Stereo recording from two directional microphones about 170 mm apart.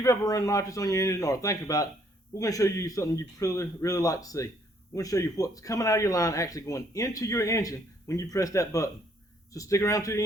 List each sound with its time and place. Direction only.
0.0 s speech: 20° left (ahead or behind)